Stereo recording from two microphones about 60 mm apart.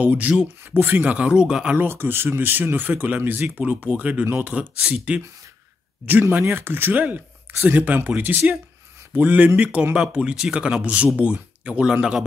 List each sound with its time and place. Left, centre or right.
0.0 s speech: right
1.0 s speech: centre
1.8 s speech: right; by 5.2 s centre
6.5 s speech: right
6.9 s speech: right